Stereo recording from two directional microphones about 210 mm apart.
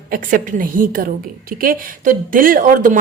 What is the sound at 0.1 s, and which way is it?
Speech, 40° right (ahead or behind).